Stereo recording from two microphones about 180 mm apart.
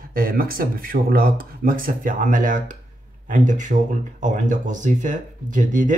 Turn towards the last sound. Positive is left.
turn(degrees=-45)  # may be behind; listen again after turning